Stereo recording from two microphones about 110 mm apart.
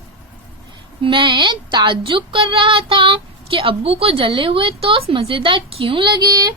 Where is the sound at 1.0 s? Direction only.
50° right (ahead or behind).